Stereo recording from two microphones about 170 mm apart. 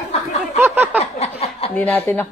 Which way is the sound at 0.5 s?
10° right (ahead or behind).